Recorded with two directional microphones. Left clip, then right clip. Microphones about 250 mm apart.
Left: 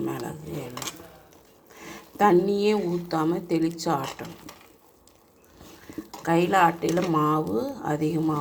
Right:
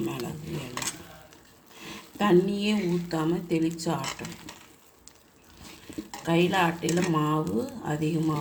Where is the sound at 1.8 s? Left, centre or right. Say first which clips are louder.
Left 7 dB; centre.